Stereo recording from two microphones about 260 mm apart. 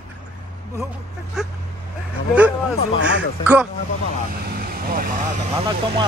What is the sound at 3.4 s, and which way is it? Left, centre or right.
Speech, centre.